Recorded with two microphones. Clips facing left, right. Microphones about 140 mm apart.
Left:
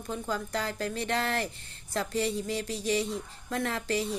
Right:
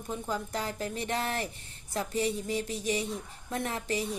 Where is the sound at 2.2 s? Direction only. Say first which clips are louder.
Even; 20° right (ahead or behind).